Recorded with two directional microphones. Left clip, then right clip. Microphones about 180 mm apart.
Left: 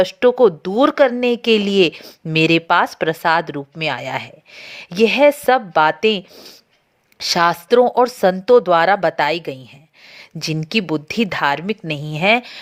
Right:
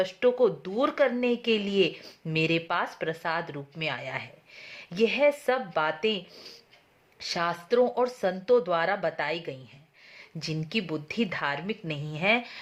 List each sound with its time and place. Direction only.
0.0 s speech: 45° left (ahead or behind)